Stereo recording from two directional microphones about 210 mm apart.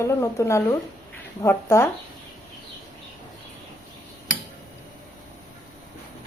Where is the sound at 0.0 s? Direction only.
15° left (ahead or behind).